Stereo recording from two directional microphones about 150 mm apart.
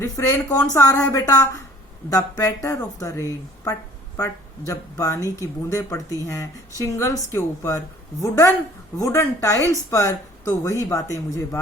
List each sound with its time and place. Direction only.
0.0 s speech: 20° left (ahead or behind)
9.0 s speech: 20° left (ahead or behind)